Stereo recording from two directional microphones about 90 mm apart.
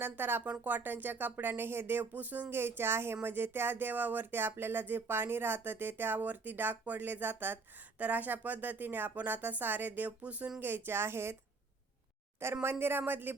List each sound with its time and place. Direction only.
0.0 s speech: 25° right (ahead or behind)
12.6 s speech: 25° right (ahead or behind)